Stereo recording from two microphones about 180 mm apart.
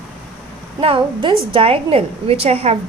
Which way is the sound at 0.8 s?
30° right (ahead or behind).